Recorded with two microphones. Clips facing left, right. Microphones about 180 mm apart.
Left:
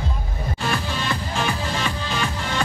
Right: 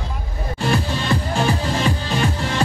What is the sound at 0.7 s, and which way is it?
Music, 30° right (ahead or behind).